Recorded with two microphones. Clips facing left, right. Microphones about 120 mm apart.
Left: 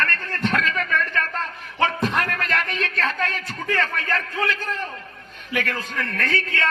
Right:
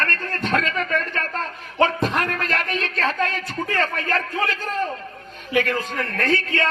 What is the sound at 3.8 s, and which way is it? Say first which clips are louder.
Speech: right 2 dB; 30° right (ahead or behind).